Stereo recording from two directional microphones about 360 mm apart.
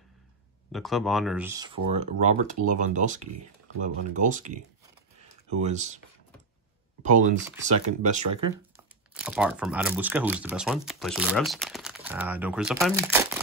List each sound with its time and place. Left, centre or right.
0.7 s speech: centre
2.0 s speech: centre
5.6 s speech: centre
7.6 s speech: centre
8.7 s speech: centre